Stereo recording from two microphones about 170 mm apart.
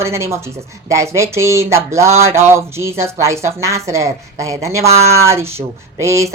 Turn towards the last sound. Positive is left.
turn(degrees=-15)  # may be behind; listen again after turning